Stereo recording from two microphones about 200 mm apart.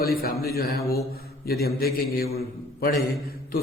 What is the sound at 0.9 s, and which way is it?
Mantra, 50° left (ahead or behind).